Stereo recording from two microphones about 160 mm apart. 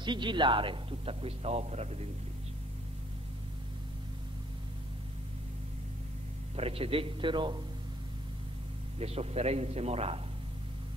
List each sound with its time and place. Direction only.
0.0 s speech: 30° right (ahead or behind)
6.5 s speech: 35° right (ahead or behind)
9.0 s speech: 40° right (ahead or behind)